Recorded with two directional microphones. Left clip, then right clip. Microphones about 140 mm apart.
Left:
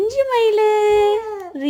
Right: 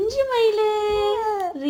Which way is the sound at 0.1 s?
60° left (ahead or behind).